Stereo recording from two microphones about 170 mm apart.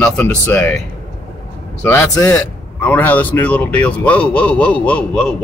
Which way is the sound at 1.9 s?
15° left (ahead or behind).